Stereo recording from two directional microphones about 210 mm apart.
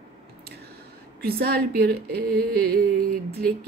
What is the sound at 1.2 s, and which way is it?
Speech, 45° right (ahead or behind).